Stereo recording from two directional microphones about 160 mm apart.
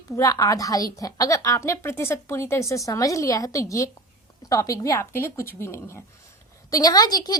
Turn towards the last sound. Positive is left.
turn(degrees=25)  # may be behind; listen again after turning